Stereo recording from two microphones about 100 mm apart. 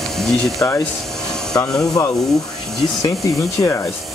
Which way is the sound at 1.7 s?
5° left (ahead or behind).